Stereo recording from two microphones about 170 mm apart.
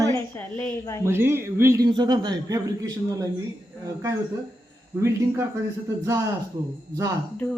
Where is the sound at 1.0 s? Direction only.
15° right (ahead or behind).